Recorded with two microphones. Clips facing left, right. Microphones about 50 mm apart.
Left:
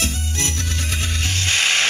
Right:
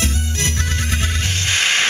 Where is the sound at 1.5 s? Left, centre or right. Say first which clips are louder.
Right 1 dB; right.